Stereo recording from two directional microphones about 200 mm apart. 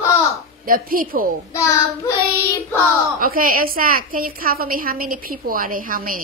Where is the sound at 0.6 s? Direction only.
45° right (ahead or behind).